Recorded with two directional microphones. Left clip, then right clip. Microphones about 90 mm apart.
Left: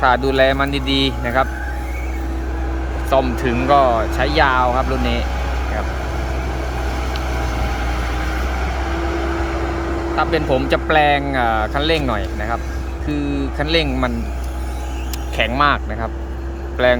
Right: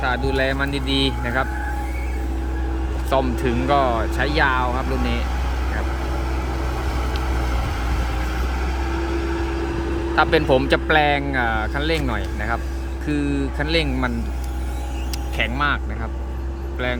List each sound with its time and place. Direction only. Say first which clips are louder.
0.0 s speech: left 7 dB; 25° left (ahead or behind)
0.4 s speech: left 6 dB; 10° left (ahead or behind)
3.4 s speech: left 3 dB; 25° left (ahead or behind)
3.7 s speech: left 6 dB; 15° left (ahead or behind)
6.5 s vehicle: left 3 dB; 10° left (ahead or behind); by 10.2 s 45° left (ahead or behind)
10.2 s speech: right 1 dB; 10° right (ahead or behind)
15.4 s speech: left 6 dB; 15° left (ahead or behind)